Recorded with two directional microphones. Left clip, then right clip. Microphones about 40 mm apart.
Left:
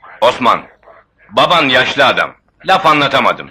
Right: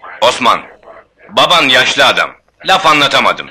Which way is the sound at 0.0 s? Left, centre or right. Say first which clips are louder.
Right 1 dB; right.